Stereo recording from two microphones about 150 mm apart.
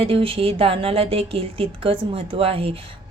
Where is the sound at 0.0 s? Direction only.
40° right (ahead or behind).